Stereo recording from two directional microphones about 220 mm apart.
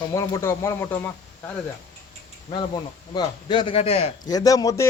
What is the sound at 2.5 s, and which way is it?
Speech, 20° left (ahead or behind).